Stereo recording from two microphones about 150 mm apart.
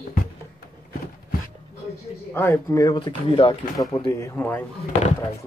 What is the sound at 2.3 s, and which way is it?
Speech, 15° left (ahead or behind).